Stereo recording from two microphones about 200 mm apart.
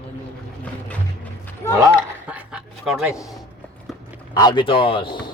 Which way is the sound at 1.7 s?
10° right (ahead or behind).